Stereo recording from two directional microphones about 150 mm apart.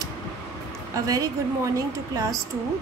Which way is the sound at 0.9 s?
25° right (ahead or behind).